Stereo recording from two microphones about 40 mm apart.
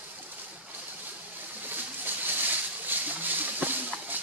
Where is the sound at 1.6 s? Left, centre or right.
Right.